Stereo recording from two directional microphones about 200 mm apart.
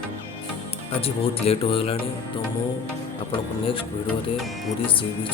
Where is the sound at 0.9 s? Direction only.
30° left (ahead or behind).